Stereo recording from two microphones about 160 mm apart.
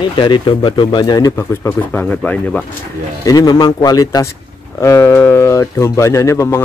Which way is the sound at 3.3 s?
25° left (ahead or behind).